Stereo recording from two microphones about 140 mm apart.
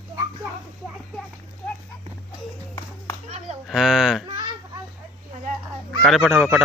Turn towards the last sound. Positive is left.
turn(degrees=-5)  # may be behind; listen again after turning